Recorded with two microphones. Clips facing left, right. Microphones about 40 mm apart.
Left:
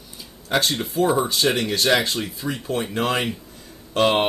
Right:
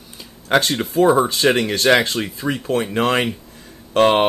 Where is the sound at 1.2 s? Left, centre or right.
Right.